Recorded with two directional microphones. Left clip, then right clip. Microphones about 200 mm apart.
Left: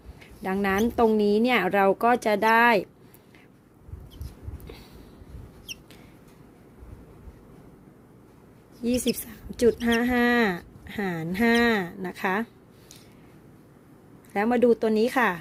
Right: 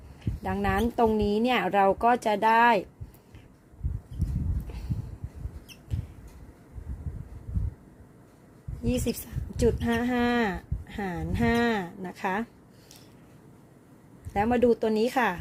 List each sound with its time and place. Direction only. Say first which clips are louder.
0.4 s speech: left 2 dB; 15° left (ahead or behind)
8.8 s speech: left 3 dB; 20° left (ahead or behind)
14.3 s speech: left 2 dB; 15° left (ahead or behind)